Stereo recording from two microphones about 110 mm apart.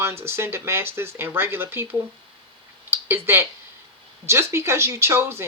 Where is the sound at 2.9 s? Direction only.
20° right (ahead or behind).